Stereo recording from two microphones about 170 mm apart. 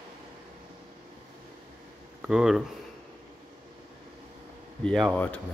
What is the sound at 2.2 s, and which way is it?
Speech, 5° right (ahead or behind).